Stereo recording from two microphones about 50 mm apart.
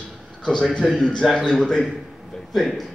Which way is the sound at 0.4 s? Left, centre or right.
Centre.